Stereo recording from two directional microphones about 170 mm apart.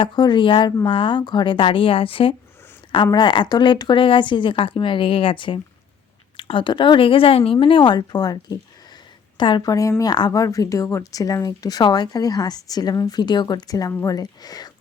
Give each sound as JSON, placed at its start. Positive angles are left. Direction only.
{"t": 0.0, "sound": "speech", "side_deg": 25}